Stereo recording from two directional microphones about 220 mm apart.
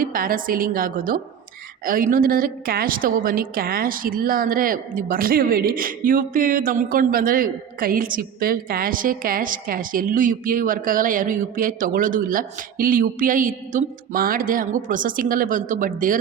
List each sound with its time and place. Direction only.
0.0 s a woman's voice: 40° right (ahead or behind)